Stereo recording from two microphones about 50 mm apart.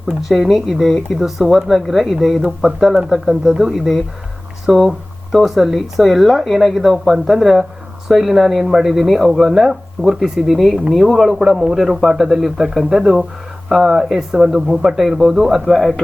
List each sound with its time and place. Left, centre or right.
0.2 s speech: centre